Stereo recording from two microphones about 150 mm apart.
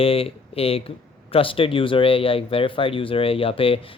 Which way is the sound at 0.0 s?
40° left (ahead or behind).